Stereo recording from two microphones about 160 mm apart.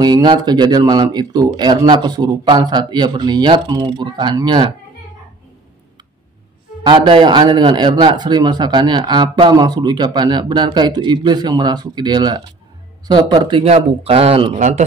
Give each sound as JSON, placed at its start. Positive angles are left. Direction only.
{"t": 0.0, "sound": "speech", "side_deg": -25}
{"t": 6.9, "sound": "speech", "side_deg": -30}